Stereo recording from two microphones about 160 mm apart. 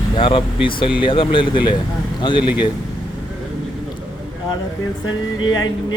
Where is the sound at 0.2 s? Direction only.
35° left (ahead or behind).